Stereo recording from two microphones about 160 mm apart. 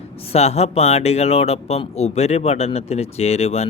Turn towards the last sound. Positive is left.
turn(degrees=40)  # may be behind; listen again after turning